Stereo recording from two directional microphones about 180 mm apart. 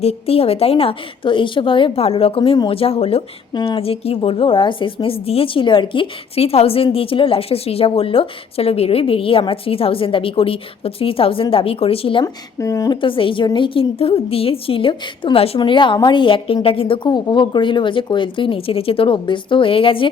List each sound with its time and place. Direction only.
0.0 s speech: 35° left (ahead or behind)
12.2 s a woman's voice: 15° left (ahead or behind)